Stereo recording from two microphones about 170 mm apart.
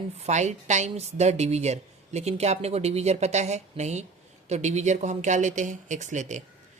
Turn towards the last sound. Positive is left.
turn(degrees=-45)  # may be behind; listen again after turning